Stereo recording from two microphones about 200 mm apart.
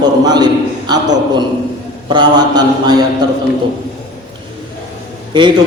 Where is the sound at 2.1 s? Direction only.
20° right (ahead or behind).